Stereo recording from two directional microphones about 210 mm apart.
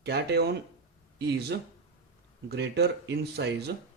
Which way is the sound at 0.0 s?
55° right (ahead or behind).